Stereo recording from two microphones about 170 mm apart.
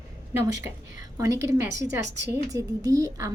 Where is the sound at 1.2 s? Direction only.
20° right (ahead or behind).